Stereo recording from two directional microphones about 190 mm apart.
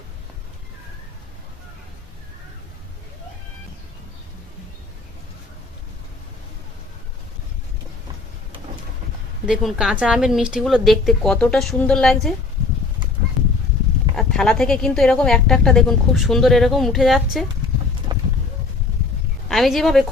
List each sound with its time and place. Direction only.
9.5 s a woman's voice: 5° right (ahead or behind)
14.2 s a woman's voice: centre (ahead or behind)
18.1 s a sound: 25° right (ahead or behind)
19.5 s a woman's voice: centre (ahead or behind)